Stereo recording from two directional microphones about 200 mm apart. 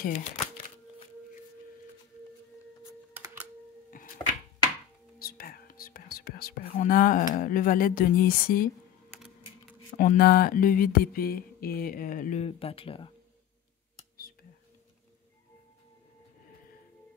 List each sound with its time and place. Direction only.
0.0 s speech: 40° left (ahead or behind)
3.9 s chopping: 45° left (ahead or behind)
5.2 s whispering: 45° left (ahead or behind)
9.9 s a sound: 45° left (ahead or behind); by 13.1 s 25° left (ahead or behind)